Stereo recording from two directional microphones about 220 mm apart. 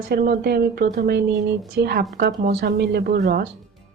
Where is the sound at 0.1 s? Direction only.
45° right (ahead or behind).